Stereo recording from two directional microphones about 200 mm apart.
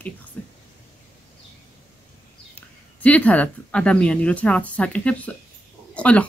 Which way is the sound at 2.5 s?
5° left (ahead or behind).